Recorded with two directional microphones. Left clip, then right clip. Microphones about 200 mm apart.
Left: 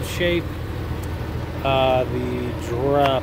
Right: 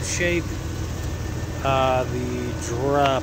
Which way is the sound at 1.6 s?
Centre (ahead or behind).